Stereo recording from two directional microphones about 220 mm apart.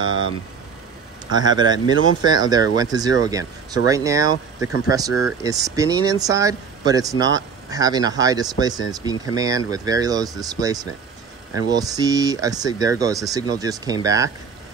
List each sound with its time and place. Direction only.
1.2 s speech: 20° right (ahead or behind)